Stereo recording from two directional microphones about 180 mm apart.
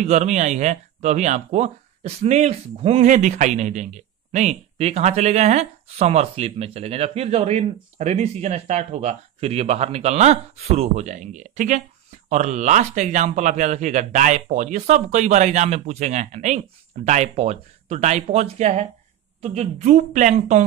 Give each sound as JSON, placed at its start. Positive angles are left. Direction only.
{"t": 0.0, "sound": "speech", "side_deg": -40}